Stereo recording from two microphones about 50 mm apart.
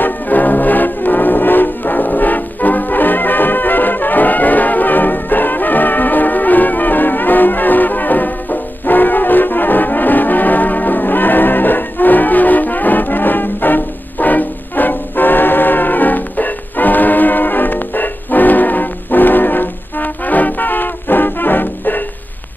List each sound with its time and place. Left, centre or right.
0.0 s music: left